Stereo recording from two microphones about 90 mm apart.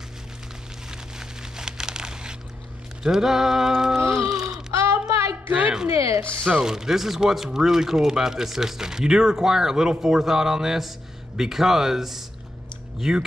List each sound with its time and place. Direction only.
1.4 s crumpling: 5° right (ahead or behind)
3.0 s speech: 5° right (ahead or behind)
4.4 s a sound: 5° right (ahead or behind)
4.7 s child singing: 30° right (ahead or behind)
5.1 s music: 35° right (ahead or behind)
5.5 s a sound: 10° right (ahead or behind)
5.9 s speech: 35° right (ahead or behind)
6.5 s speech: 5° right (ahead or behind)